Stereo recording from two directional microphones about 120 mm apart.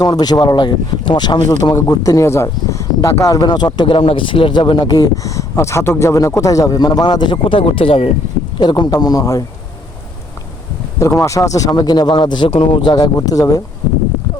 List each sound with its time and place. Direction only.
0.0 s speech: 35° left (ahead or behind); by 8.1 s 50° left (ahead or behind)
8.5 s speech: 35° left (ahead or behind)
11.0 s speech: 25° left (ahead or behind)